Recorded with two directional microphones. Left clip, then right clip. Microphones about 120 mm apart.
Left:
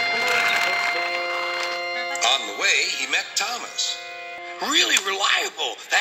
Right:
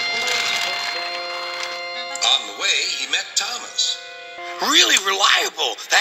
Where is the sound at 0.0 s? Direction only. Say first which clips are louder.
Left 1 dB; 15° left (ahead or behind); by 4.0 s 45° left (ahead or behind).